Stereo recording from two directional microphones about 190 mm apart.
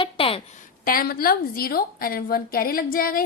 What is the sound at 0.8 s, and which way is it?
A woman's voice, 50° left (ahead or behind).